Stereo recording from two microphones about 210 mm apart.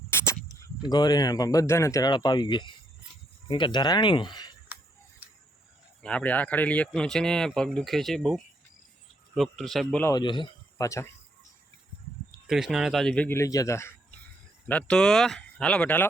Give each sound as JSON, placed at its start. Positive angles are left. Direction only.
{"t": 0.1, "sound": "a sound", "side_deg": 10}
{"t": 0.9, "sound": "speech", "side_deg": 20}
{"t": 6.0, "sound": "speech", "side_deg": 5}
{"t": 12.5, "sound": "speech", "side_deg": 0}